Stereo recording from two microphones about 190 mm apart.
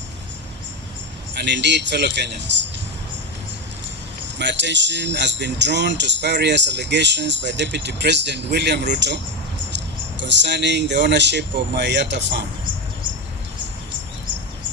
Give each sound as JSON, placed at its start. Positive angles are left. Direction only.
{"t": 1.4, "sound": "a man's voice", "side_deg": -65}
{"t": 4.4, "sound": "speech", "side_deg": -65}